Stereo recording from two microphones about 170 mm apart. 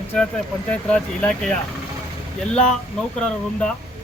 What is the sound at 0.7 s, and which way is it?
Speech, 5° left (ahead or behind).